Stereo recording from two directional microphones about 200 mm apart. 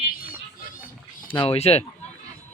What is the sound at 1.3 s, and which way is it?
Speech, 25° left (ahead or behind).